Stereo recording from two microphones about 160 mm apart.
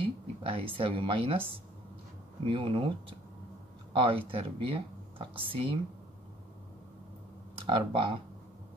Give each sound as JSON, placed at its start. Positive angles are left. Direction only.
{"t": 0.0, "sound": "speech", "side_deg": -35}
{"t": 2.4, "sound": "speech", "side_deg": -35}
{"t": 3.9, "sound": "speech", "side_deg": -35}
{"t": 7.5, "sound": "speech", "side_deg": -35}